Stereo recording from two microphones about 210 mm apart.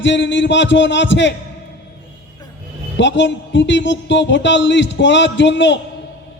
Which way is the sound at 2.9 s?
60° left (ahead or behind).